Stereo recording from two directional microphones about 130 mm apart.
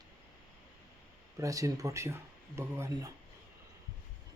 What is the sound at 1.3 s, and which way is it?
Speech, 25° right (ahead or behind).